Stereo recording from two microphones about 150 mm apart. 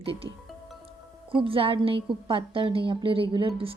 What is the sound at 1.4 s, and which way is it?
Speech, 35° right (ahead or behind).